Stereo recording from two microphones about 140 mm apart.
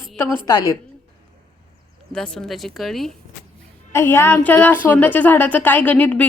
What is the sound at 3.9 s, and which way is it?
Speech, 15° left (ahead or behind).